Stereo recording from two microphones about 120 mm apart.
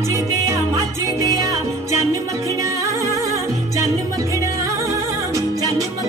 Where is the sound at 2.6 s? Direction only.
25° right (ahead or behind).